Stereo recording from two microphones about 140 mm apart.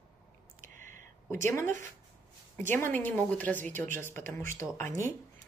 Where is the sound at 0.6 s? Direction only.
65° right (ahead or behind).